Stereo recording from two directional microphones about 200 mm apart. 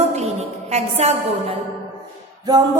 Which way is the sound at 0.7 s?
30° right (ahead or behind).